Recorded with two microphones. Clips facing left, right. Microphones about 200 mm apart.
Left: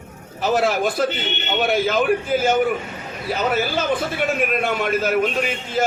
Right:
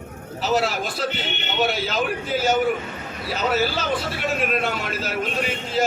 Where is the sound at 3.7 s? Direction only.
50° left (ahead or behind).